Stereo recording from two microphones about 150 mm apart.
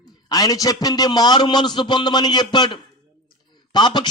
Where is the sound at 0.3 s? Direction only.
25° left (ahead or behind).